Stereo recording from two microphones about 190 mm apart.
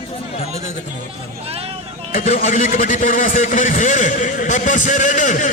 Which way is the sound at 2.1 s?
45° left (ahead or behind).